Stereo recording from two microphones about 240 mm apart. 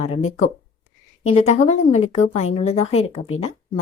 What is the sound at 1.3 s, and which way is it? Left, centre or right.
A woman's voice, left.